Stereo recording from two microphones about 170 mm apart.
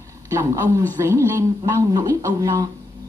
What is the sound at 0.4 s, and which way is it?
A woman's voice, 15° right (ahead or behind).